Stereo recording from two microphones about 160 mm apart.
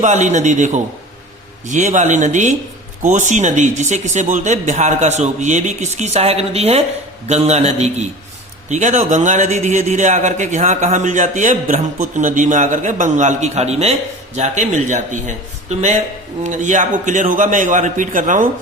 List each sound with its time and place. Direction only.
0.0 s a man's voice: 50° right (ahead or behind)